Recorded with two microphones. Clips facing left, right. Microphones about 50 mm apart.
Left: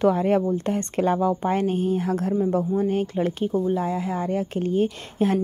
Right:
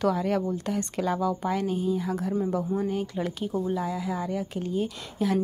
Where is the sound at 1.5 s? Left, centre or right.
Left.